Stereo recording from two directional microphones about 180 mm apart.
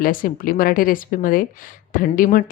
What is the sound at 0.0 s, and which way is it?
Speech, 50° left (ahead or behind).